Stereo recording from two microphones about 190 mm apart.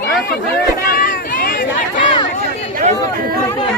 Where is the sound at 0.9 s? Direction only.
50° left (ahead or behind).